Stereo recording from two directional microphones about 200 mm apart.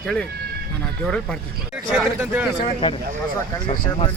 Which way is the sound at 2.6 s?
30° left (ahead or behind).